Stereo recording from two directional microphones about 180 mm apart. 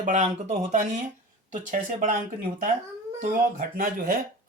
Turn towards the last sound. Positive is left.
turn(degrees=-50)  # may be behind; listen again after turning